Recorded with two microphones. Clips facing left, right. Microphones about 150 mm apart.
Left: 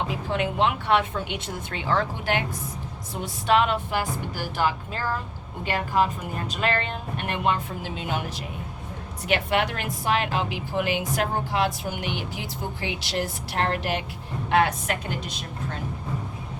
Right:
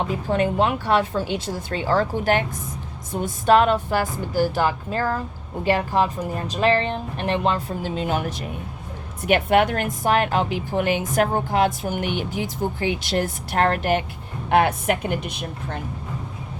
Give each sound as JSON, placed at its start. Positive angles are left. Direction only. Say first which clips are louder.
{"t": 0.3, "sound": "a woman's voice", "louder": "right 4 dB", "side_deg": -40}
{"t": 7.8, "sound": "a woman's voice", "louder": "right 6 dB", "side_deg": -45}
{"t": 9.2, "sound": "a woman's voice", "louder": "right 6 dB", "side_deg": -55}